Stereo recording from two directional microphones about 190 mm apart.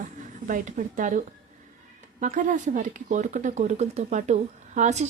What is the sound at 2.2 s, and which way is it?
Speech, 40° right (ahead or behind).